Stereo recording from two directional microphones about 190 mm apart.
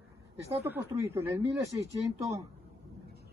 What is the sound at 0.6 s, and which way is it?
Speech, 10° right (ahead or behind).